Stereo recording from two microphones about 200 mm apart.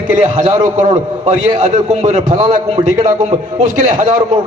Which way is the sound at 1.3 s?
35° right (ahead or behind).